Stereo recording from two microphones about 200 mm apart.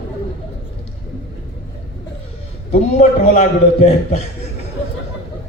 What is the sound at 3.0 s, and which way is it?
A man's voice, 35° left (ahead or behind).